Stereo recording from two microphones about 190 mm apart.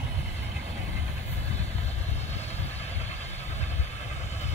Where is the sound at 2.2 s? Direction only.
35° left (ahead or behind).